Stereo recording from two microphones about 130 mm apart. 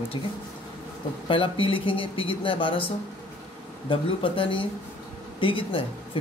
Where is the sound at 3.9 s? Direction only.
45° left (ahead or behind).